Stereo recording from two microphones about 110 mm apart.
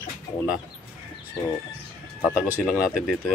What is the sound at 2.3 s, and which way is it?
Speech, 10° right (ahead or behind).